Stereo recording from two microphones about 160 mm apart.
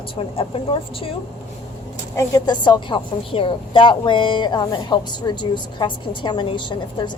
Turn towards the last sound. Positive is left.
turn(degrees=30)  # may be behind; listen again after turning